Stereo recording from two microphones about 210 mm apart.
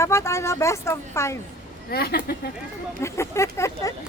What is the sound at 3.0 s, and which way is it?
Speech, 15° left (ahead or behind).